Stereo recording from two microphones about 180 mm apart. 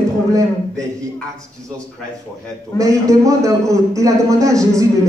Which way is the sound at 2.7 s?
15° right (ahead or behind).